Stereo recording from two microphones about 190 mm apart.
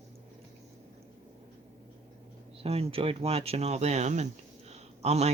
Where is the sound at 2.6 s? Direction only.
30° right (ahead or behind).